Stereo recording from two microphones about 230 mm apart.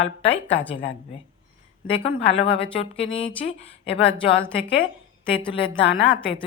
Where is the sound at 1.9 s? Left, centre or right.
Left.